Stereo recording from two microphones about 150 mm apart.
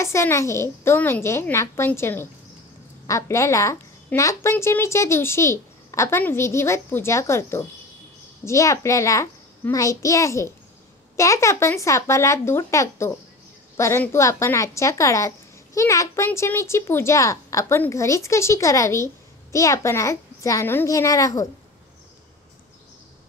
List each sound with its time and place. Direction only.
0.0 s a woman's voice: 20° left (ahead or behind)